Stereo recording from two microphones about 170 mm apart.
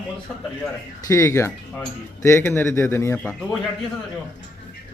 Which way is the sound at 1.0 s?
20° left (ahead or behind).